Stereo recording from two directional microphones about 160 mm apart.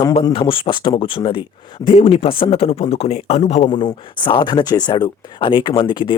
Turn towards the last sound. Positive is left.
turn(degrees=30)  # may be behind; listen again after turning